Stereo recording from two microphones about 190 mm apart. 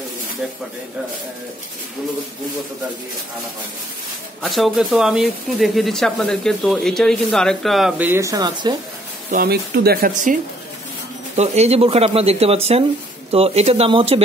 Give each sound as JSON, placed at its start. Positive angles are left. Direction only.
{"t": 4.4, "sound": "speech", "side_deg": 0}
{"t": 9.3, "sound": "speech", "side_deg": -55}
{"t": 11.3, "sound": "speech", "side_deg": -35}